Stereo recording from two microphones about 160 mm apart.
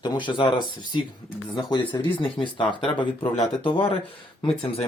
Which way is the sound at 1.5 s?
30° left (ahead or behind).